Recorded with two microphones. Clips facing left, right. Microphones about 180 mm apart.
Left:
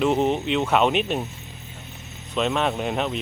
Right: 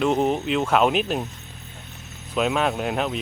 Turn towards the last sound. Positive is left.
turn(degrees=0)  # may be behind; listen again after turning